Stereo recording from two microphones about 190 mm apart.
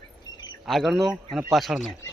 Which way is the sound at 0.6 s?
Centre (ahead or behind).